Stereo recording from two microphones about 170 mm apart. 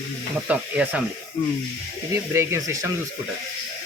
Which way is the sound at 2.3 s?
15° right (ahead or behind).